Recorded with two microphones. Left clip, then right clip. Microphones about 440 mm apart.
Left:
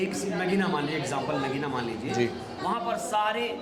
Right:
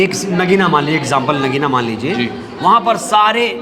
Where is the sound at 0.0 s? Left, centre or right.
Right.